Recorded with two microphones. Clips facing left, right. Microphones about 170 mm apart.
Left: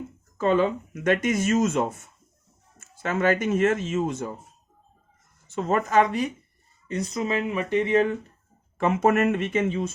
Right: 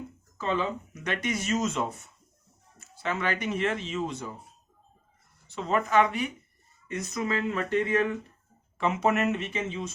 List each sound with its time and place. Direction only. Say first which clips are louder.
0.3 s speech: left 8 dB; 50° left (ahead or behind)
5.5 s speech: left 3 dB; 45° left (ahead or behind); by 8.1 s 25° left (ahead or behind)
8.8 s speech: left 5 dB; 50° left (ahead or behind)